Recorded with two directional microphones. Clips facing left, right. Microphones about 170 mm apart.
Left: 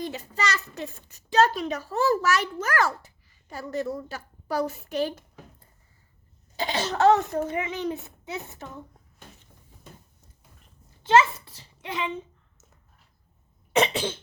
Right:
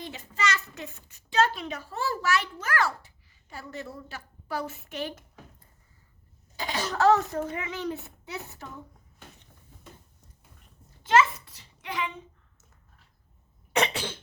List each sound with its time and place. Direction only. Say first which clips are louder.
0.0 s a child's voice: left 2 dB; 40° left (ahead or behind); by 8.6 s 20° left (ahead or behind)
11.0 s a child's voice: left 3 dB; 30° left (ahead or behind)
13.7 s a child's voice: left 4 dB; 20° left (ahead or behind)